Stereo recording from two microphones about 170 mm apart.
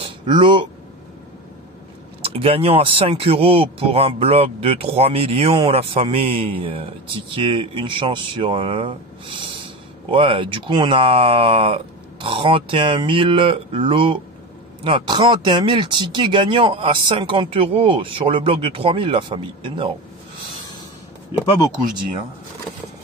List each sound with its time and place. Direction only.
0.0 s speech: 30° right (ahead or behind)
2.2 s speech: 35° right (ahead or behind)